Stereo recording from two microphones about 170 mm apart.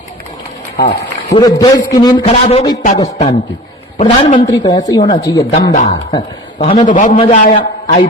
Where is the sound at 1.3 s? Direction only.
25° left (ahead or behind).